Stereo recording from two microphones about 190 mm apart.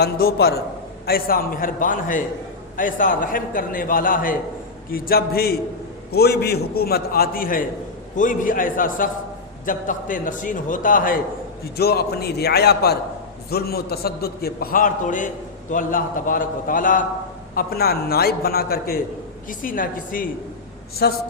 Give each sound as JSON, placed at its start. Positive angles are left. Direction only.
{"t": 0.0, "sound": "a man's voice", "side_deg": 55}
{"t": 21.0, "sound": "a man's voice", "side_deg": 60}